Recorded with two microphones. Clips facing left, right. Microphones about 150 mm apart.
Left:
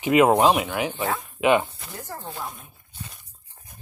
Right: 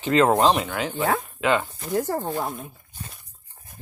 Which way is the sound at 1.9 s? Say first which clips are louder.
Right 14 dB; 90° right.